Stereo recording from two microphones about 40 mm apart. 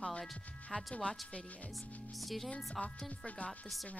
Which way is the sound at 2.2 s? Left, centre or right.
Centre.